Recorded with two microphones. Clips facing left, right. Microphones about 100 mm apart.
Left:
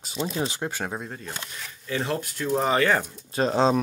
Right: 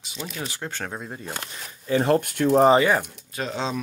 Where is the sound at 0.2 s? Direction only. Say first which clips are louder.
Left 6 dB; 25° left (ahead or behind).